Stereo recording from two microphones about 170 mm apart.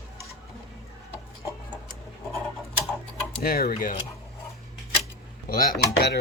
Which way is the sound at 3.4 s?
60° left (ahead or behind).